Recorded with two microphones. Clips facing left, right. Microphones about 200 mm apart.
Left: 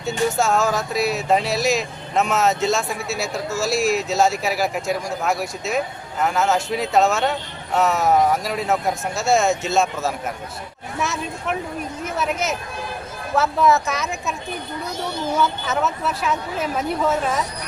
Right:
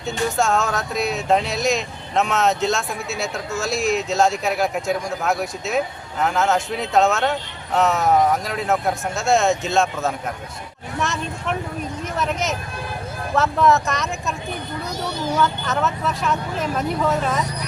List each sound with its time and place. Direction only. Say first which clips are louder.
0.3 s speech: left 1 dB; centre (ahead or behind)
15.4 s speech: even; centre (ahead or behind)